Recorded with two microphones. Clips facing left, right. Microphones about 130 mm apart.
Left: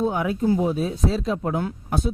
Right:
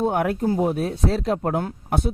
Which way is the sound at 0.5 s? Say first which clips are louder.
Even; 55° right (ahead or behind).